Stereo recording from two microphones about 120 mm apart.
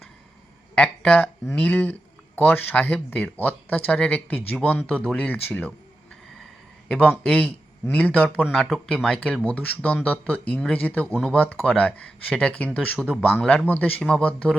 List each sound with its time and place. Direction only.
0.8 s speech: 10° left (ahead or behind)
6.8 s speech: 10° left (ahead or behind)